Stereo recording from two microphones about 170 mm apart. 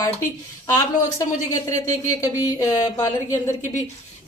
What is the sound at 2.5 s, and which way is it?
Speech, 20° left (ahead or behind).